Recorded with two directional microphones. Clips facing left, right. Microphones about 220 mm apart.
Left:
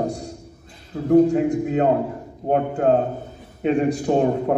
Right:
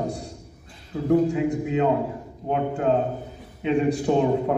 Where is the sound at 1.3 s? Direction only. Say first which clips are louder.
Left 4 dB; 45° left (ahead or behind).